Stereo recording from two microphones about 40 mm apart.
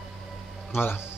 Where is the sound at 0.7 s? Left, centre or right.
Left.